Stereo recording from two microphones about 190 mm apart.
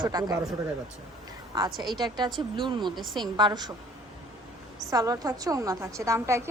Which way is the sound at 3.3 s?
20° right (ahead or behind).